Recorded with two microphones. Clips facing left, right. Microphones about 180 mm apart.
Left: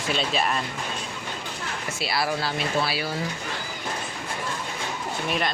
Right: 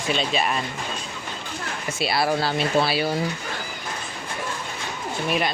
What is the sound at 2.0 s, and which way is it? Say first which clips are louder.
Speech: right 5 dB; 25° right (ahead or behind).